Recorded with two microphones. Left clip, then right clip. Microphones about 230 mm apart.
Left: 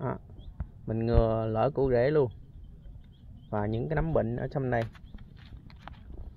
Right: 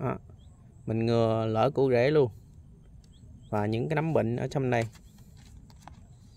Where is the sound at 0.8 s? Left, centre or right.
Right.